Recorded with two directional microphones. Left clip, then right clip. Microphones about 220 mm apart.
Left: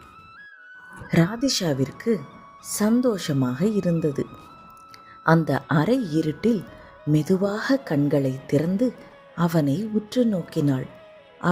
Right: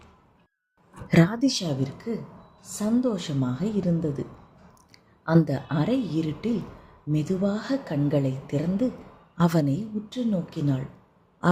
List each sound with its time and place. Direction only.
0.9 s speech: centre (ahead or behind)
1.5 s speech: 35° left (ahead or behind)
5.5 s speech: 40° left (ahead or behind)
9.4 s a woman's voice: centre (ahead or behind)
9.7 s speech: 40° left (ahead or behind)